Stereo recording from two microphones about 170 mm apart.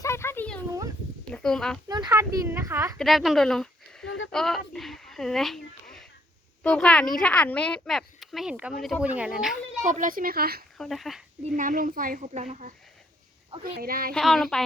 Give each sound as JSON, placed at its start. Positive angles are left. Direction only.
{"t": 0.0, "sound": "a sound", "side_deg": 15}
{"t": 1.3, "sound": "speech", "side_deg": 5}
{"t": 2.0, "sound": "speech", "side_deg": -15}
{"t": 3.0, "sound": "speech", "side_deg": 0}
{"t": 4.0, "sound": "a sound", "side_deg": 90}
{"t": 4.3, "sound": "a sound", "side_deg": 0}
{"t": 6.6, "sound": "speech", "side_deg": 5}
{"t": 9.8, "sound": "speech", "side_deg": -50}
{"t": 10.8, "sound": "speech", "side_deg": 0}
{"t": 11.4, "sound": "speech", "side_deg": -50}
{"t": 13.7, "sound": "speech", "side_deg": -65}
{"t": 14.1, "sound": "speech", "side_deg": 0}